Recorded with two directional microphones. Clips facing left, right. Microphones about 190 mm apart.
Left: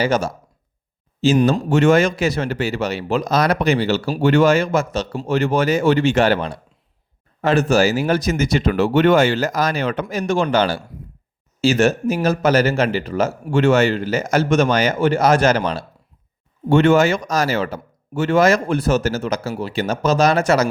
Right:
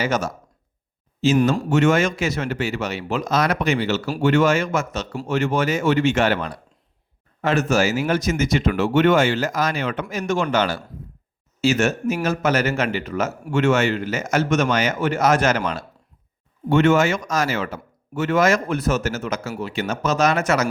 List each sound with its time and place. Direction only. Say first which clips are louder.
0.0 s a man's voice: left 4 dB; 30° left (ahead or behind)